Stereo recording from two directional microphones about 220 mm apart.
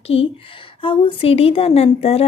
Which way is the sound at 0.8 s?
25° left (ahead or behind).